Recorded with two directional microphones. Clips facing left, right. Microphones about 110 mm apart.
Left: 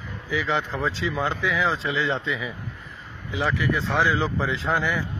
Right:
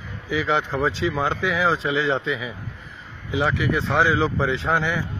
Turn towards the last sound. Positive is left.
turn(degrees=0)  # may be behind; listen again after turning